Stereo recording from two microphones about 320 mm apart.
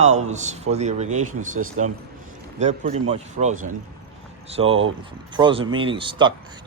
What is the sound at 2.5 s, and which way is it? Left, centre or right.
A man's voice, right.